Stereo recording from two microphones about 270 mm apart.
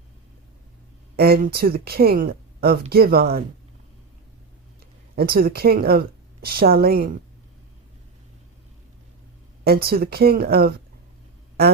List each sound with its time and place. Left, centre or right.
1.1 s speech: right
5.1 s speech: right
9.6 s speech: right